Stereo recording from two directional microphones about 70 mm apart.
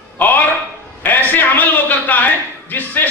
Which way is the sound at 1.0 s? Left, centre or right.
Left.